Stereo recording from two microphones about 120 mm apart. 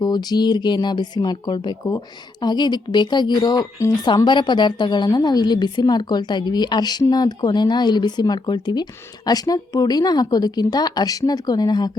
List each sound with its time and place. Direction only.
0.0 s speech: 35° left (ahead or behind)